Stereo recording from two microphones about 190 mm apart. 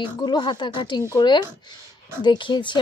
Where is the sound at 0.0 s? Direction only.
25° left (ahead or behind).